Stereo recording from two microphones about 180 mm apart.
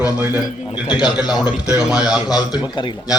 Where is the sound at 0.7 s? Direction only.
25° left (ahead or behind).